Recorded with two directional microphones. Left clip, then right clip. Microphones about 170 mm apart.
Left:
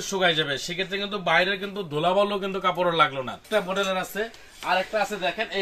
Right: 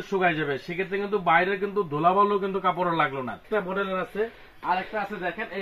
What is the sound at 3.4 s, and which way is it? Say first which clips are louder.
Speech: left 3 dB; 20° left (ahead or behind).